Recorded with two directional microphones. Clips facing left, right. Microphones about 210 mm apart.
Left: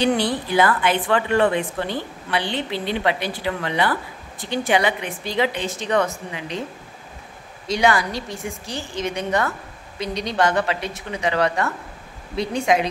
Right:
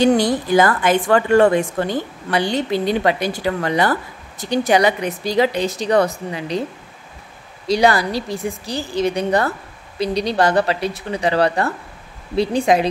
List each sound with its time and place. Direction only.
0.0 s speech: 45° right (ahead or behind)
7.6 s a woman's voice: 35° right (ahead or behind)